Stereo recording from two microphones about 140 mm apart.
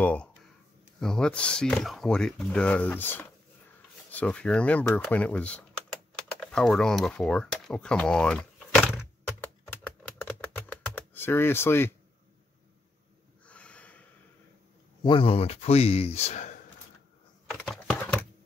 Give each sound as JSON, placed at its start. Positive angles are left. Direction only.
{"t": 0.0, "sound": "a sound", "side_deg": 10}
{"t": 0.9, "sound": "speech", "side_deg": 5}
{"t": 10.0, "sound": "typing", "side_deg": 10}
{"t": 13.5, "sound": "snort", "side_deg": 10}
{"t": 15.0, "sound": "speech", "side_deg": 40}
{"t": 17.5, "sound": "computer keyboard", "side_deg": 5}
{"t": 17.9, "sound": "typing", "side_deg": 10}